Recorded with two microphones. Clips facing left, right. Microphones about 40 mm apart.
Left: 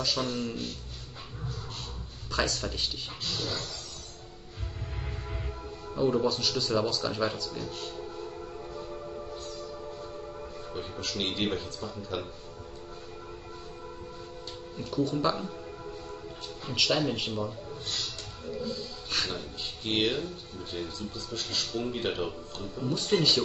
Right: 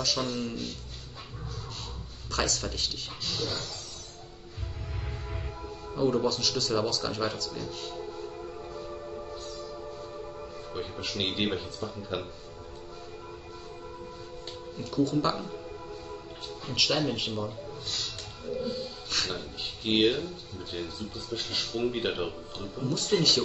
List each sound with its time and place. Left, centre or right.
0.0 s speech: centre
2.3 s speech: centre
5.9 s speech: centre
10.7 s a man's voice: centre
14.8 s speech: centre
16.6 s speech: centre
18.6 s speech: centre
19.1 s speech: centre
19.8 s speech: centre
22.8 s speech: centre